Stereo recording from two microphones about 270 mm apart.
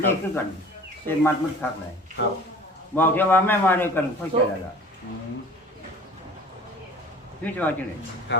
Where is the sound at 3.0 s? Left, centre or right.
Centre.